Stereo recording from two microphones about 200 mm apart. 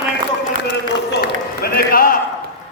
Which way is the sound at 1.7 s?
45° left (ahead or behind).